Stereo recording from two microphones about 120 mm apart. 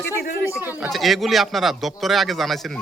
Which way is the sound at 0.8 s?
Centre (ahead or behind).